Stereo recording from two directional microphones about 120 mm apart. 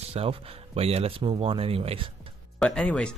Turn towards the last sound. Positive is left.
turn(degrees=10)  # may be behind; listen again after turning